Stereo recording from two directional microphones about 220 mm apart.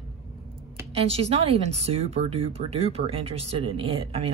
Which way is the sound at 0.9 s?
25° right (ahead or behind).